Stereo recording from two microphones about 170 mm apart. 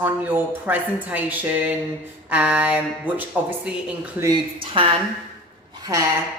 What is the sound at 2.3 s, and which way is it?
Speech, 10° right (ahead or behind).